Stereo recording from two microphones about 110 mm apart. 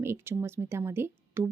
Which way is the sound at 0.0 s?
25° right (ahead or behind).